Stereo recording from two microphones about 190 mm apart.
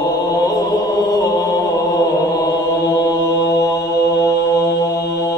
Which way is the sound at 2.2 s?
20° left (ahead or behind).